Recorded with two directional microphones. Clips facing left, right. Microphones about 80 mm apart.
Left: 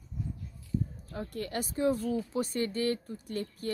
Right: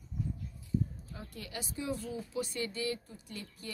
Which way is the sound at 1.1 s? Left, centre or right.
Left.